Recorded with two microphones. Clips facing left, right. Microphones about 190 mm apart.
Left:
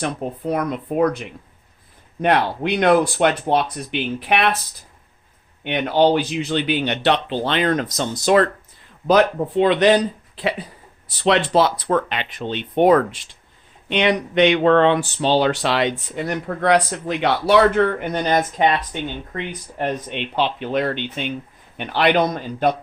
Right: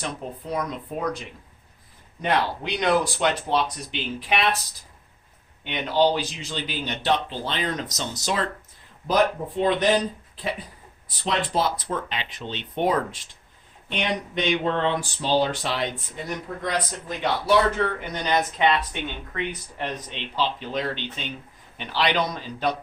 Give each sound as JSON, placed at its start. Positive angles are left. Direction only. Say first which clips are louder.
{"t": 0.0, "sound": "speech", "louder": "left 8 dB", "side_deg": 60}
{"t": 2.2, "sound": "speech", "louder": "left 6 dB", "side_deg": 60}
{"t": 5.6, "sound": "speech", "louder": "left 5 dB", "side_deg": 60}
{"t": 7.9, "sound": "a man's voice", "louder": "left 11 dB", "side_deg": 55}
{"t": 9.0, "sound": "speech", "louder": "left 6 dB", "side_deg": 75}
{"t": 19.8, "sound": "a man's voice", "louder": "left 8 dB", "side_deg": 60}